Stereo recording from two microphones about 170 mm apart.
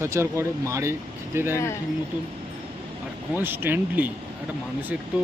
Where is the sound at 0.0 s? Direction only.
15° right (ahead or behind).